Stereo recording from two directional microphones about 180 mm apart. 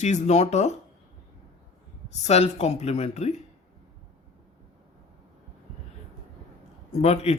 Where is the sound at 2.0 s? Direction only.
40° left (ahead or behind).